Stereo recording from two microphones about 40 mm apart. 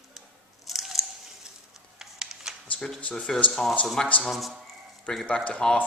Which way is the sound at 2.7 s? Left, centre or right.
Centre.